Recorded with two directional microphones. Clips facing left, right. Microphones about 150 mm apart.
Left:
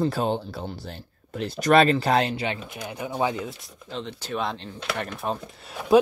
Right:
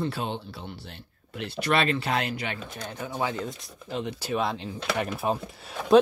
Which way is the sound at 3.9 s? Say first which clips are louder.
Right 2 dB; 10° right (ahead or behind).